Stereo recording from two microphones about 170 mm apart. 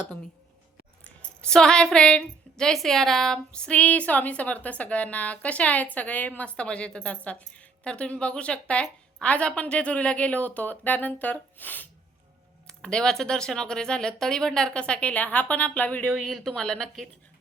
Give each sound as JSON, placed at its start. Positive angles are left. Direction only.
{"t": 1.0, "sound": "a woman's voice", "side_deg": 5}
{"t": 16.0, "sound": "speech", "side_deg": -5}